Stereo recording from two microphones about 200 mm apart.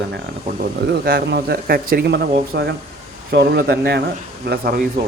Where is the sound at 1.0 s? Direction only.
50° right (ahead or behind).